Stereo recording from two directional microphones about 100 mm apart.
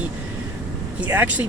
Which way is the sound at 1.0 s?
15° right (ahead or behind).